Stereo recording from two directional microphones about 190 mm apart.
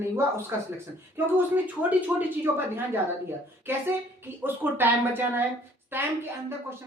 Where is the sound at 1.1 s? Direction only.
10° right (ahead or behind).